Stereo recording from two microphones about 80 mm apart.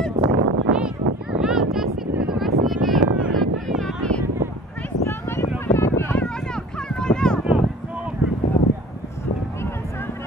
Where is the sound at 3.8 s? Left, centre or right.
Centre.